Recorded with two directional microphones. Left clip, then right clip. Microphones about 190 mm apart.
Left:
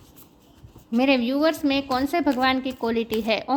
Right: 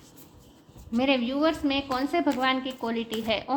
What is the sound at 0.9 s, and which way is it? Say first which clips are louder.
A woman's voice: left 4 dB; 50° left (ahead or behind).